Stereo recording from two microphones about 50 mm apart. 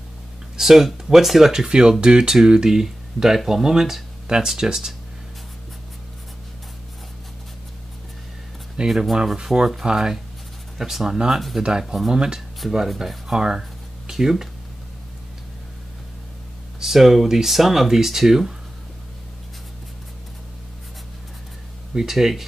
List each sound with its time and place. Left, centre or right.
0.6 s speech: centre
8.8 s speech: centre
12.1 s speech: centre
13.3 s a sound: centre
16.8 s speech: centre
21.9 s speech: centre